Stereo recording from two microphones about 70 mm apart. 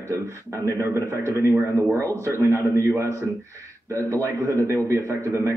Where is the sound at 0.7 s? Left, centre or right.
Right.